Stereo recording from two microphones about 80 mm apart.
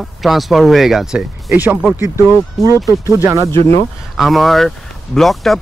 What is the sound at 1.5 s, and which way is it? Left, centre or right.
Speech, centre.